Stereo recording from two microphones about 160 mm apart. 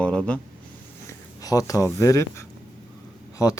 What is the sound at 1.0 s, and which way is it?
Speech, 20° left (ahead or behind).